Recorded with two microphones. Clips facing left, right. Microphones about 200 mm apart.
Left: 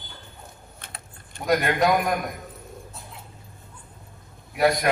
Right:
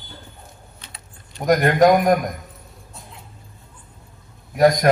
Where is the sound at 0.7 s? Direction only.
50° left (ahead or behind).